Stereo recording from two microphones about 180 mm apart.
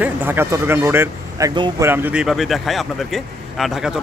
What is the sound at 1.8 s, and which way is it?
Speech, 10° right (ahead or behind).